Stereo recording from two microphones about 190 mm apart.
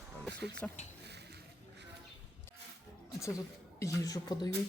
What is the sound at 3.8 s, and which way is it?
Speech, 20° left (ahead or behind).